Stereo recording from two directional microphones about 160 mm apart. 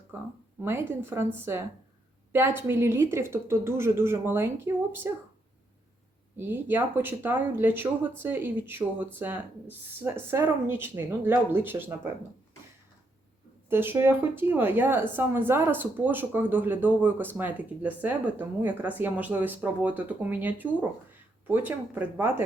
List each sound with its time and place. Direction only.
0.1 s a woman's voice: 15° right (ahead or behind)
6.3 s a woman's voice: 15° right (ahead or behind)
13.7 s a woman's voice: 15° right (ahead or behind)